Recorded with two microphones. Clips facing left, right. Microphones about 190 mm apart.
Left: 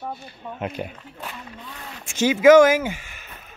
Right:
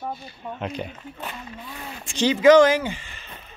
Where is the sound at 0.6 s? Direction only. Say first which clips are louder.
Left 2 dB; 5° left (ahead or behind).